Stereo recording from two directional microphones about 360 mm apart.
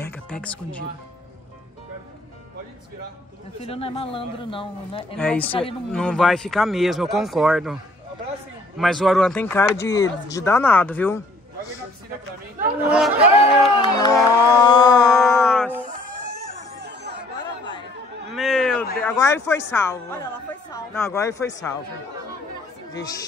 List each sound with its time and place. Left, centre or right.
0.0 s music: centre
3.6 s speech: centre
5.1 s speech: centre
5.5 s speech: centre
5.9 s speech: centre
12.9 s speech: centre
13.7 s speech: centre
15.1 s a sound: centre
16.8 s chatter: right
17.4 s chatter: centre
18.3 s a sound: centre
18.9 s speech: centre